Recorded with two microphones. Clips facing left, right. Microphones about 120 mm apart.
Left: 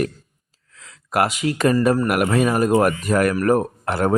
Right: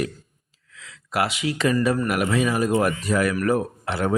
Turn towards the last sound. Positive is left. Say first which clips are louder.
# left 4 dB
turn(degrees=45)  # may be behind; listen again after turning